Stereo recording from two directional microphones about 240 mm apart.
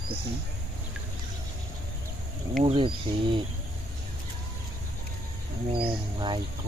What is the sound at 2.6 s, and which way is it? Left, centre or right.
Speech, right.